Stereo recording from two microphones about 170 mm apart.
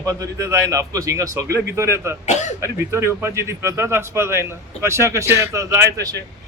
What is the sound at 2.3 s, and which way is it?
Speech, 45° left (ahead or behind).